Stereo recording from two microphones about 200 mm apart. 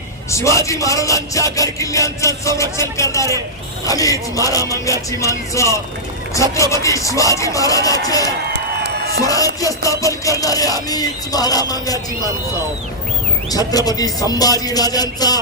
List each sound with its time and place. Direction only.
0.3 s music: 15° left (ahead or behind)
8.5 s music: 55° right (ahead or behind)
9.2 s music: 15° left (ahead or behind)
13.5 s music: 20° left (ahead or behind)